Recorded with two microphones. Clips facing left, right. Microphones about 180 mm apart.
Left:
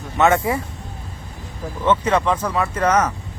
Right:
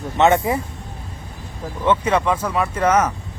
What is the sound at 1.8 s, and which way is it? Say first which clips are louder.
Speech: even; 10° right (ahead or behind).